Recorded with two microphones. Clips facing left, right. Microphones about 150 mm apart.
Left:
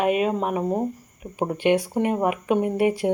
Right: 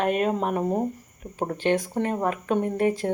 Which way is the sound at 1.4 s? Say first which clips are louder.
Left 3 dB; 15° left (ahead or behind).